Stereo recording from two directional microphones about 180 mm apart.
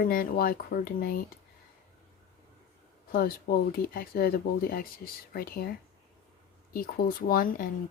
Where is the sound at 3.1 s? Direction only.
55° left (ahead or behind).